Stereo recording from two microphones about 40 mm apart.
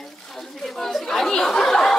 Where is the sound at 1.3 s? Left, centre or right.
Centre.